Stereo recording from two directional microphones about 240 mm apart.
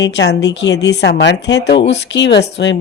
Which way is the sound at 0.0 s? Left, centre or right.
Left.